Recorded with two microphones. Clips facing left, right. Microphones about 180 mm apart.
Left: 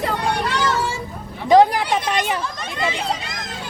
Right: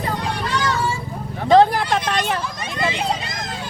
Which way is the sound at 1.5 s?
15° left (ahead or behind).